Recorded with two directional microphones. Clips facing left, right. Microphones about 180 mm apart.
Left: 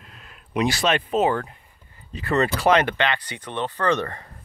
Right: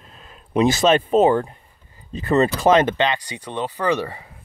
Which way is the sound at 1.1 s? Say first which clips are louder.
Right 5 dB; 30° right (ahead or behind).